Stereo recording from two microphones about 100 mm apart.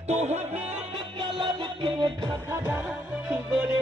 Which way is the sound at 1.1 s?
55° right (ahead or behind).